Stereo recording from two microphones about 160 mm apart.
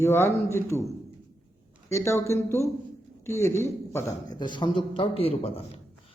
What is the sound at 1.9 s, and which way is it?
A man's voice, 15° left (ahead or behind).